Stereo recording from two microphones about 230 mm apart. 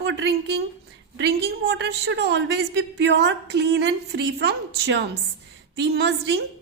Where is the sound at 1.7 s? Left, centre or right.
Right.